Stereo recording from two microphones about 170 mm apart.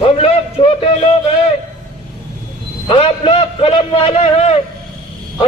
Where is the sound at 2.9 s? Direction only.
30° left (ahead or behind).